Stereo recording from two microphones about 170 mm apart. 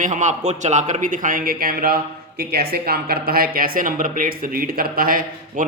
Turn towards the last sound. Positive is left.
turn(degrees=-55)  # may be behind; listen again after turning